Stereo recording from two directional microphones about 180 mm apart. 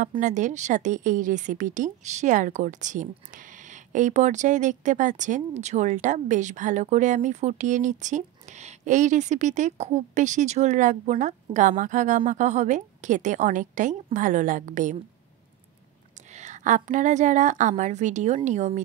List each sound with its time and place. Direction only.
0.2 s a woman's voice: 45° right (ahead or behind)
16.3 s a woman's voice: 40° right (ahead or behind)